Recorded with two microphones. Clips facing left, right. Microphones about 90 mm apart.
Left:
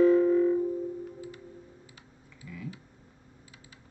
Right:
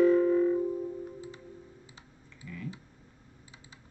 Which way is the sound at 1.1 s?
25° right (ahead or behind).